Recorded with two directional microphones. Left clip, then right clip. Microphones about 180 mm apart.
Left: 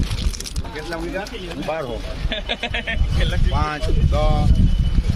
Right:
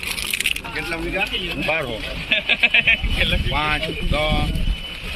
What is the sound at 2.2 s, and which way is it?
Speech, 30° left (ahead or behind).